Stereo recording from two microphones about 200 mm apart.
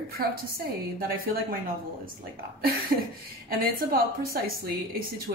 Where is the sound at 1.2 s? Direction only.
45° right (ahead or behind).